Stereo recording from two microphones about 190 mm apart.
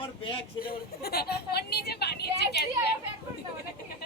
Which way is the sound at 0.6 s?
55° left (ahead or behind).